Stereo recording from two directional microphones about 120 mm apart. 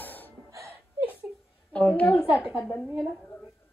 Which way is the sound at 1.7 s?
10° left (ahead or behind).